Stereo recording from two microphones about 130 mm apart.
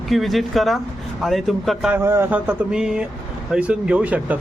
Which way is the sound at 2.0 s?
15° right (ahead or behind).